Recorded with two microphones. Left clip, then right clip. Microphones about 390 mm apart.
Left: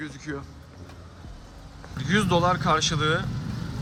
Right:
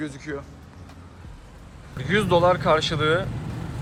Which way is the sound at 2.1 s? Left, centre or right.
Centre.